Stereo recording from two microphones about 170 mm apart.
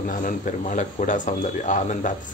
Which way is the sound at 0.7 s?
45° left (ahead or behind).